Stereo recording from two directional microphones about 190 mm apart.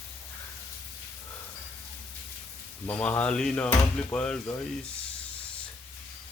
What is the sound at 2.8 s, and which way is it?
Speech, 10° left (ahead or behind).